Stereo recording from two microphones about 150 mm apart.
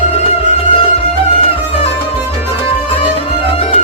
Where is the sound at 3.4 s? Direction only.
40° left (ahead or behind).